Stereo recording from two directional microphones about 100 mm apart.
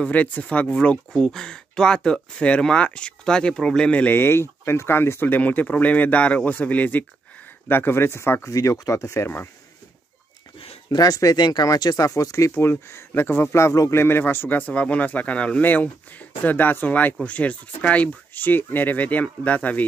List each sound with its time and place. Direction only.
0.0 s speech: 15° left (ahead or behind)
10.9 s speech: 40° left (ahead or behind); by 19.8 s 15° left (ahead or behind)